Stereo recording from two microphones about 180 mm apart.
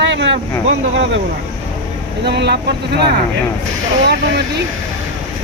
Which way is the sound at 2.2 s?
70° right (ahead or behind).